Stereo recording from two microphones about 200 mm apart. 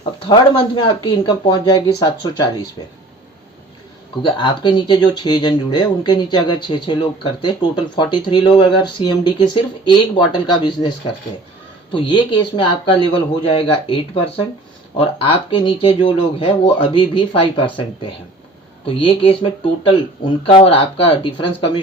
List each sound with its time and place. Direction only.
0.0 s speech: 25° left (ahead or behind)
4.2 s speech: 25° left (ahead or behind)